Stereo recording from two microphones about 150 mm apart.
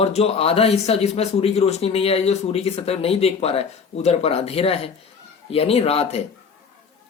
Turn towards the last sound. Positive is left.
turn(degrees=40)  # may be behind; listen again after turning